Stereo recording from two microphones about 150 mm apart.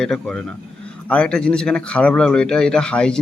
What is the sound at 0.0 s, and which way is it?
Speech, 5° left (ahead or behind).